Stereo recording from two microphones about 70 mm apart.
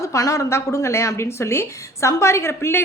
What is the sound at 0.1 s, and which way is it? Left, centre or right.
A woman's voice, left.